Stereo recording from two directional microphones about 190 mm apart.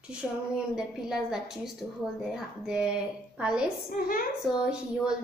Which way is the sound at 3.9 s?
50° left (ahead or behind).